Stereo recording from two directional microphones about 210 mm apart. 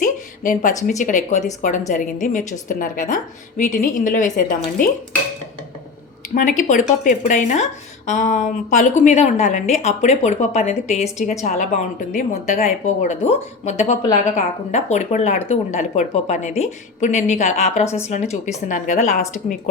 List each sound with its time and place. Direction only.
0.0 s a sound: 40° left (ahead or behind)
0.9 s a woman's voice: 35° left (ahead or behind)
6.3 s a woman's voice: 40° left (ahead or behind)